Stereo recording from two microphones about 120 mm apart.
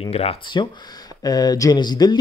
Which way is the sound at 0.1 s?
55° left (ahead or behind).